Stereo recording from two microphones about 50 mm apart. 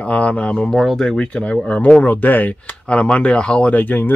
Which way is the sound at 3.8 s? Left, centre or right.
Left.